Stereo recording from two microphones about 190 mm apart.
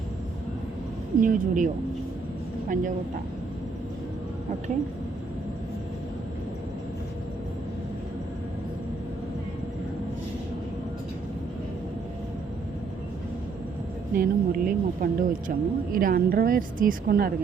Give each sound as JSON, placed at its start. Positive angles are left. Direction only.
{"t": 1.2, "sound": "speech", "side_deg": -45}
{"t": 14.1, "sound": "speech", "side_deg": -50}